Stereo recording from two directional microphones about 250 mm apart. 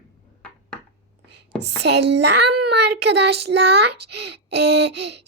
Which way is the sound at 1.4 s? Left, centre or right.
Right.